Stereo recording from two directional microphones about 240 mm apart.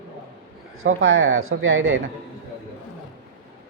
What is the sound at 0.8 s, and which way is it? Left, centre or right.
Speech, right.